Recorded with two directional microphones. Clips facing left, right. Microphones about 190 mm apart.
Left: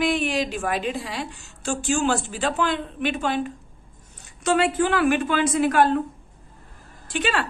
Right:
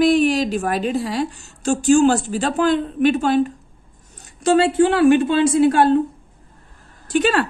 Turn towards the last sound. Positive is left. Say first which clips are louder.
# right 8 dB
turn(degrees=-45)  # may be behind; listen again after turning